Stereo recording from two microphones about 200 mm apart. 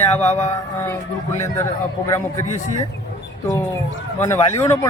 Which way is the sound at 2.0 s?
15° left (ahead or behind).